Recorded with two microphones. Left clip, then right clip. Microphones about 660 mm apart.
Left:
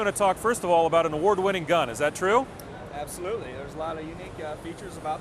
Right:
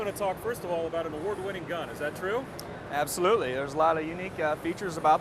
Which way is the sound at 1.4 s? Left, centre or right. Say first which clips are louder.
Left 10 dB; left.